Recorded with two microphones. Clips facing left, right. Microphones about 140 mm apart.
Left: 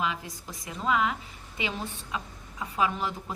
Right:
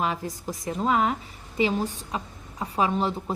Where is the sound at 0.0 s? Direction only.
45° right (ahead or behind).